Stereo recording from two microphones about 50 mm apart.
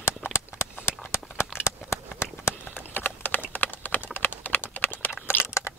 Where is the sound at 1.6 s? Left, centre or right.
Left.